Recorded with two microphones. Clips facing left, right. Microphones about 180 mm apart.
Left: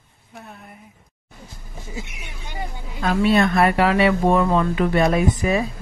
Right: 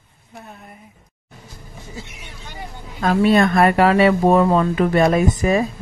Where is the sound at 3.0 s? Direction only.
45° right (ahead or behind).